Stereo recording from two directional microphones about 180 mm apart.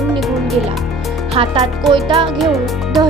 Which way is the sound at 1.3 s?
30° right (ahead or behind).